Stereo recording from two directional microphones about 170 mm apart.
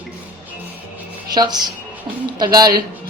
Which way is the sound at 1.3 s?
25° right (ahead or behind).